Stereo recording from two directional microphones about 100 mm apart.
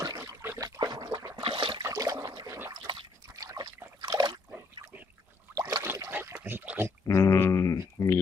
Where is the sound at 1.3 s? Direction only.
55° right (ahead or behind).